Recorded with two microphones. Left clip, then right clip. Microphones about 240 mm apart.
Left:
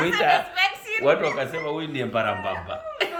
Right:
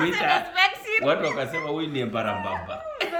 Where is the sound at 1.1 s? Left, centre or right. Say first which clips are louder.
Left 7 dB; centre.